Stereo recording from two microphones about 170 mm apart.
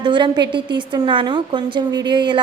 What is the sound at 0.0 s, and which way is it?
A woman's voice, 25° right (ahead or behind).